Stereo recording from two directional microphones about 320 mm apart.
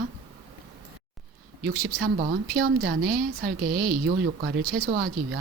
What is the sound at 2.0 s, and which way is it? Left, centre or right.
Speech, right.